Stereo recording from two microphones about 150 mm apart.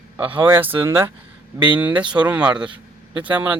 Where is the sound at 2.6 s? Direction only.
30° right (ahead or behind).